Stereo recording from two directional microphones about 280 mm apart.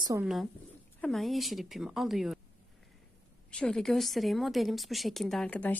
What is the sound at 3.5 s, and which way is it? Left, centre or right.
A woman's voice, centre.